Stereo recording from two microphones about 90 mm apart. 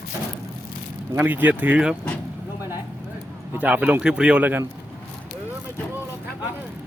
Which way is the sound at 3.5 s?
15° right (ahead or behind).